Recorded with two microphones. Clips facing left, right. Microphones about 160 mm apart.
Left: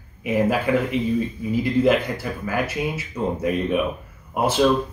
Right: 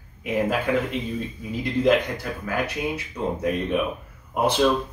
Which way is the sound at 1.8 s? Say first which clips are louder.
Left 1 dB; 5° left (ahead or behind).